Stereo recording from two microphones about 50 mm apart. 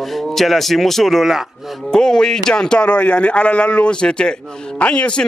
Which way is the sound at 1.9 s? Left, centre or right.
Centre.